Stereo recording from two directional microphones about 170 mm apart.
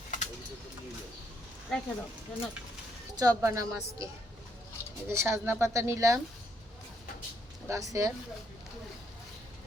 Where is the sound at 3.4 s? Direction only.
20° right (ahead or behind).